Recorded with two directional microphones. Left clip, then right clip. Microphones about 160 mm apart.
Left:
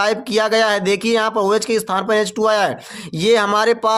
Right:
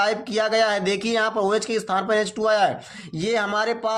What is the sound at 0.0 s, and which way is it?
Speech, 50° left (ahead or behind).